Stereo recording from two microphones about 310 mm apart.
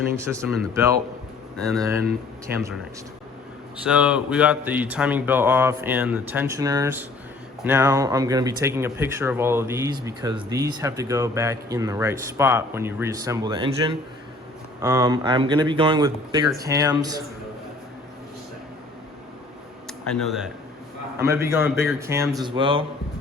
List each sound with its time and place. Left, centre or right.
0.2 s speech: centre
1.5 s speech: centre
3.8 s speech: centre
19.9 s speech: centre
22.4 s speech: centre